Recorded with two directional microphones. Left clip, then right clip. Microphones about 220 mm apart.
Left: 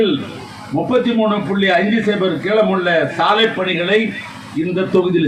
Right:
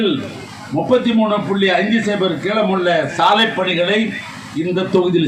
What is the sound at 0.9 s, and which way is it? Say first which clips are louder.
Speech: right 1 dB; 50° right (ahead or behind).